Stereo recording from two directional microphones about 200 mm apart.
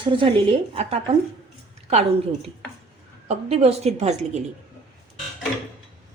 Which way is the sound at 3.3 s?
30° right (ahead or behind).